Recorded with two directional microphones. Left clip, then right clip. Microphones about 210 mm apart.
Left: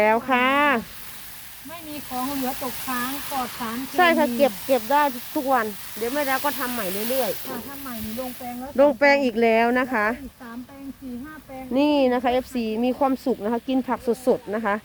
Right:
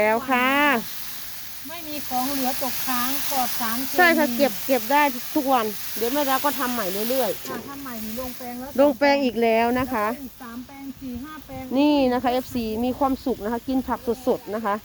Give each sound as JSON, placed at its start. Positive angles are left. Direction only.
{"t": 0.0, "sound": "speech", "side_deg": 10}
{"t": 2.0, "sound": "speech", "side_deg": -30}
{"t": 3.9, "sound": "speech", "side_deg": 0}
{"t": 5.6, "sound": "speech", "side_deg": -15}
{"t": 8.0, "sound": "snake", "side_deg": -15}
{"t": 8.7, "sound": "speech", "side_deg": 0}
{"t": 11.7, "sound": "speech", "side_deg": 0}